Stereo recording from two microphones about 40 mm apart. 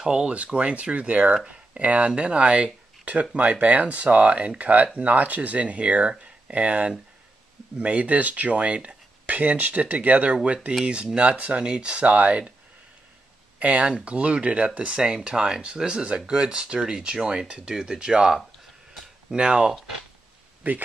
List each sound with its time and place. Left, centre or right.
0.2 s speech: right
12.0 s speech: right
13.6 s speech: right
15.0 s speech: centre
19.3 s speech: right
20.6 s speech: right